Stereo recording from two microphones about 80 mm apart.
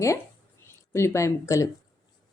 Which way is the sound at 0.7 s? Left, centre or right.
Left.